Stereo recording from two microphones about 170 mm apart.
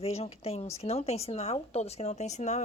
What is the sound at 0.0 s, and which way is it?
A woman's voice, 35° left (ahead or behind).